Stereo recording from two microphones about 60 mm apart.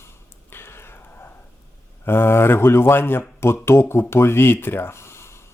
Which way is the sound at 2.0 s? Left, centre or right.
Left.